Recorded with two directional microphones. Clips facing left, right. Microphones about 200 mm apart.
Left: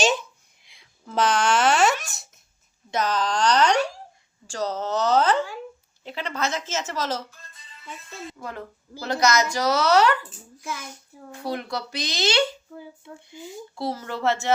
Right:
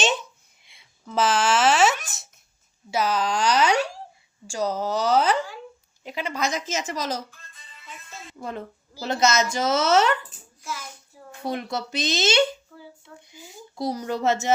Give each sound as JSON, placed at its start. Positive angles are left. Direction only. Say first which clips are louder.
{"t": 0.6, "sound": "a sound", "louder": "right 1 dB", "side_deg": 0}
{"t": 2.9, "sound": "a woman's voice", "louder": "right 1 dB", "side_deg": -10}
{"t": 8.4, "sound": "speech", "louder": "right 2 dB", "side_deg": -20}
{"t": 11.4, "sound": "speech", "louder": "right 1 dB", "side_deg": -20}
{"t": 13.7, "sound": "a woman's voice", "louder": "right 3 dB", "side_deg": -15}